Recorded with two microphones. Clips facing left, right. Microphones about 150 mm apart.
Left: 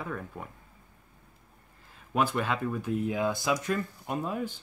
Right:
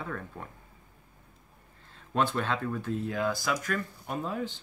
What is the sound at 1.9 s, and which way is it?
Speech, 10° left (ahead or behind).